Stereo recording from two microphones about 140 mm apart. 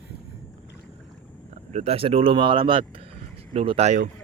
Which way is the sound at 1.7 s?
50° right (ahead or behind).